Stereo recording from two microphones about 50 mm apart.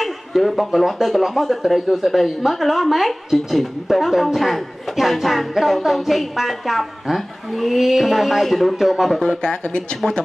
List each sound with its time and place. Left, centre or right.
0.3 s a man's voice: centre
9.2 s speech: centre